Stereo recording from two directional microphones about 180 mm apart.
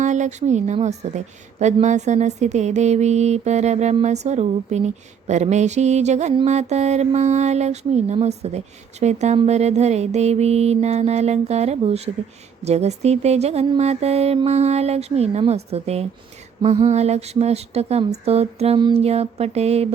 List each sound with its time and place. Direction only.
0.0 s mantra: 40° right (ahead or behind)